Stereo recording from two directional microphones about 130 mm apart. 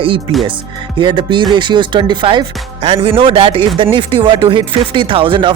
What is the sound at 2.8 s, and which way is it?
Speech, 50° right (ahead or behind).